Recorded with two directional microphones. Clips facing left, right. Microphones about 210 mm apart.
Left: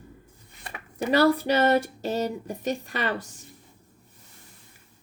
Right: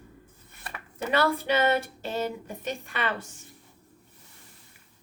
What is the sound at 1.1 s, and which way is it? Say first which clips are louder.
Speech: left 4 dB; 40° left (ahead or behind).